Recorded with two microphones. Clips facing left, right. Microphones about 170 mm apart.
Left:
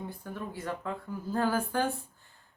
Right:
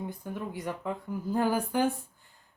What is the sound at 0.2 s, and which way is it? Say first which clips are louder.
Speech: right 2 dB; 15° right (ahead or behind).